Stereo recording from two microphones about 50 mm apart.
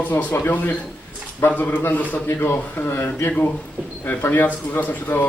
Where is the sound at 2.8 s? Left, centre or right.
Left.